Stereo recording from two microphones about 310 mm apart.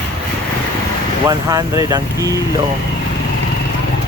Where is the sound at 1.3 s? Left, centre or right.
Centre.